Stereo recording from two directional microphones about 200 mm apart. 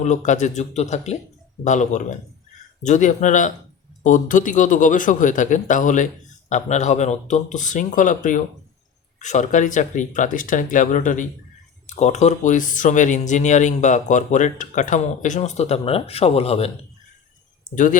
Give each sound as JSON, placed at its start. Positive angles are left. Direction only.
{"t": 0.0, "sound": "speech", "side_deg": 35}